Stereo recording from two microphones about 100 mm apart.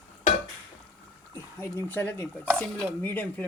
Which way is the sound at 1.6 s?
20° left (ahead or behind).